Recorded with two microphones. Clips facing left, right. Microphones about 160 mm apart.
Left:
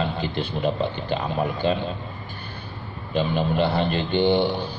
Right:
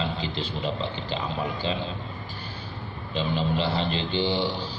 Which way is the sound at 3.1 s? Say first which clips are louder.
Left 4 dB; 55° left (ahead or behind).